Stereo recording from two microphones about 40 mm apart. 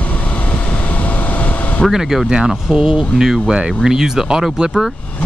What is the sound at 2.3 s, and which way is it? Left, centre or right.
Speech, right.